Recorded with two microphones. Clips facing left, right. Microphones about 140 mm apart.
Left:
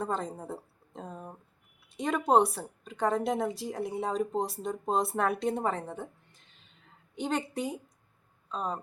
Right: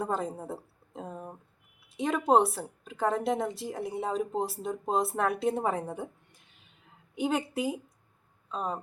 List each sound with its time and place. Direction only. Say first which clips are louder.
0.0 s a woman's voice: right 1 dB; 5° right (ahead or behind)